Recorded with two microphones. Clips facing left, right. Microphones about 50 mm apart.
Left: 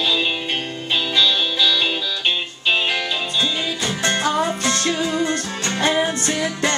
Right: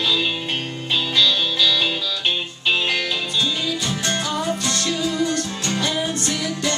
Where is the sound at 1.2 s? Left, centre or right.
Centre.